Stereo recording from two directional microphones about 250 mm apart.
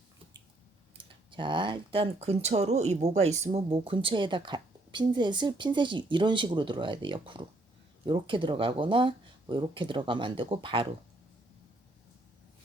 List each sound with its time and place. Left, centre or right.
0.9 s speech: centre